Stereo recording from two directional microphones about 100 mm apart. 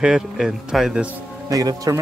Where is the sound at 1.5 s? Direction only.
35° right (ahead or behind).